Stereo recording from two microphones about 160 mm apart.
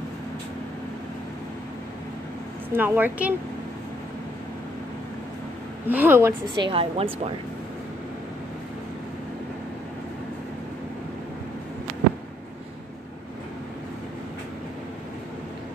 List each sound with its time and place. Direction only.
2.7 s a woman's voice: 10° right (ahead or behind)
5.9 s a woman's voice: 10° right (ahead or behind)
6.6 s speech: 35° right (ahead or behind)